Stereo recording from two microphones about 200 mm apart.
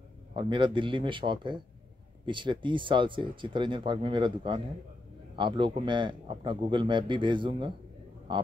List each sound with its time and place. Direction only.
0.4 s a man's voice: 25° right (ahead or behind)